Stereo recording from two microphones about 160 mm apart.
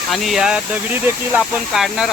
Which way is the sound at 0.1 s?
Centre (ahead or behind).